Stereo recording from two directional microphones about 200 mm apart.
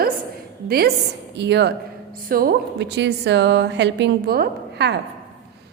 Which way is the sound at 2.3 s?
45° right (ahead or behind).